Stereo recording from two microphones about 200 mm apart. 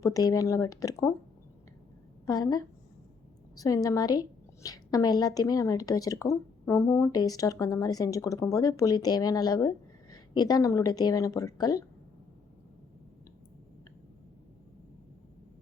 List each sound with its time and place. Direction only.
0.0 s a woman's voice: 15° left (ahead or behind)
2.2 s a woman's voice: 20° left (ahead or behind)